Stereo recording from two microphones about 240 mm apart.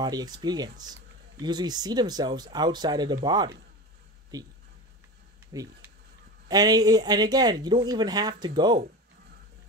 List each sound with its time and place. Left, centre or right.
0.0 s speech: centre
5.5 s speech: centre